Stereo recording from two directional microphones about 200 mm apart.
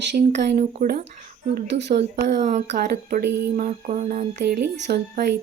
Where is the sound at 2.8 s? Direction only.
50° right (ahead or behind).